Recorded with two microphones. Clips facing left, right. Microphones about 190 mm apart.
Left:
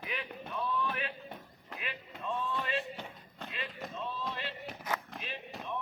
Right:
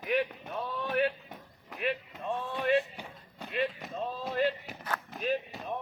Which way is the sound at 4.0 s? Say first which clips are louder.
Right 9 dB; 45° right (ahead or behind).